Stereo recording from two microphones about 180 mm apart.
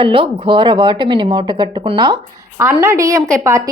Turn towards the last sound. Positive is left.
turn(degrees=-15)  # may be behind; listen again after turning